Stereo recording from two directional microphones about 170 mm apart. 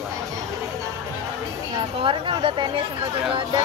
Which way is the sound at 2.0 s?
30° right (ahead or behind).